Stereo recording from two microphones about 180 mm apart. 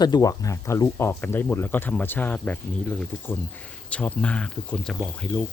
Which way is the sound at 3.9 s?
5° left (ahead or behind).